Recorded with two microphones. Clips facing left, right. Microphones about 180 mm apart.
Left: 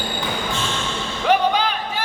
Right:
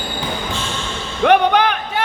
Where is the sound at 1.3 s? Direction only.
65° right (ahead or behind).